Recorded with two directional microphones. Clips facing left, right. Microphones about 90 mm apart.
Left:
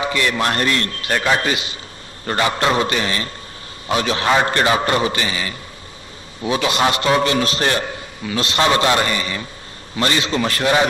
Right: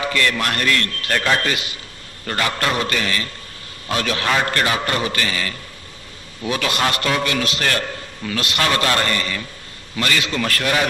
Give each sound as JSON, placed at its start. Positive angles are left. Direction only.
{"t": 0.0, "sound": "a man's voice", "side_deg": 20}
{"t": 7.7, "sound": "a sound", "side_deg": 15}
{"t": 8.4, "sound": "a man's voice", "side_deg": 25}